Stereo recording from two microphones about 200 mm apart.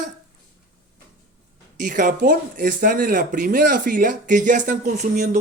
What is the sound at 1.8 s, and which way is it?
Speech, 40° right (ahead or behind).